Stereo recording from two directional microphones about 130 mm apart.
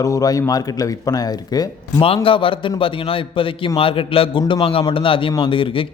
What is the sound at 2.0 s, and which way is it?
A man's voice, 45° left (ahead or behind).